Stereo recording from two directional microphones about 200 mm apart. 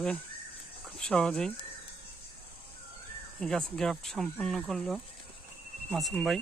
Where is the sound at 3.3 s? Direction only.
Centre (ahead or behind).